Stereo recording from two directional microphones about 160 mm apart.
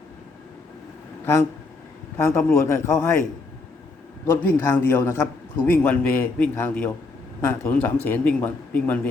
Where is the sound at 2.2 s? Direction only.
15° left (ahead or behind).